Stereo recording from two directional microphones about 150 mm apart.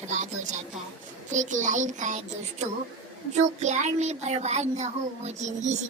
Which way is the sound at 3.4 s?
50° right (ahead or behind).